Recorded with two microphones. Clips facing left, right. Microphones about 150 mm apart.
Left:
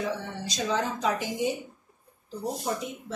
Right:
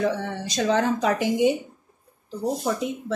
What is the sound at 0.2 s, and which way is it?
Speech, 65° right (ahead or behind).